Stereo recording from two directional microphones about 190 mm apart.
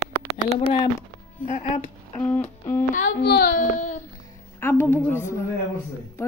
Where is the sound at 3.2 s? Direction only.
60° left (ahead or behind).